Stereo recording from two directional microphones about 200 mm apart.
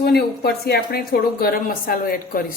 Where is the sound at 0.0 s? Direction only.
50° left (ahead or behind).